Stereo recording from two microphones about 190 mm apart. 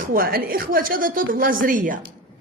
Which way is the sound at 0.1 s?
50° right (ahead or behind).